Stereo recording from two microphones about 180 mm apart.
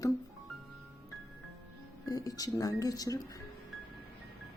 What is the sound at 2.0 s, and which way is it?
Speech, 20° left (ahead or behind).